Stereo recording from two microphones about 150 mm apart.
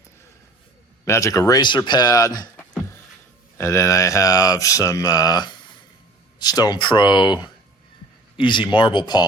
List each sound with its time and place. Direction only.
1.0 s speech: 20° left (ahead or behind)
3.6 s speech: 20° left (ahead or behind)